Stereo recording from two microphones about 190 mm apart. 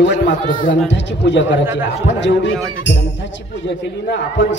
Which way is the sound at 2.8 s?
70° left (ahead or behind).